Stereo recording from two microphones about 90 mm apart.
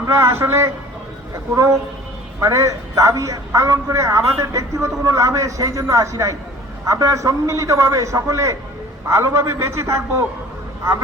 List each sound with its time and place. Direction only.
0.0 s a man's voice: 30° right (ahead or behind)